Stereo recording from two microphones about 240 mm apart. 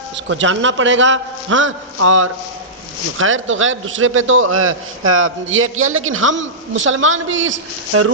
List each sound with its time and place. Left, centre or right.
0.3 s a man's voice: right